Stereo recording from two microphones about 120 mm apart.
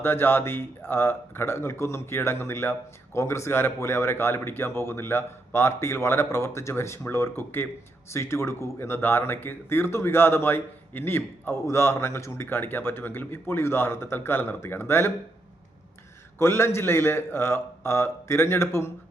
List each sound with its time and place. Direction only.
0.0 s speech: 20° left (ahead or behind)
16.4 s speech: 20° left (ahead or behind)